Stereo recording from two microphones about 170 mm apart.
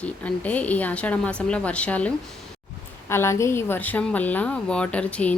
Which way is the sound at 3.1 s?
15° left (ahead or behind).